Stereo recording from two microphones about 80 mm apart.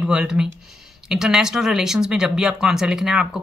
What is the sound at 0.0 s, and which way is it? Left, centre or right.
Speech, centre.